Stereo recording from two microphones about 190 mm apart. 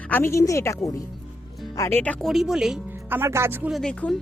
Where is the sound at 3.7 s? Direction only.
5° left (ahead or behind).